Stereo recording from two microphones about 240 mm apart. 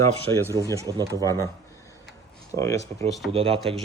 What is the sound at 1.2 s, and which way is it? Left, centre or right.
Speech, centre.